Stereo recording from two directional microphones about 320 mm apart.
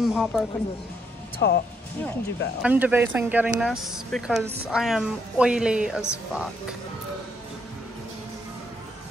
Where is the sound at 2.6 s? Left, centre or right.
Centre.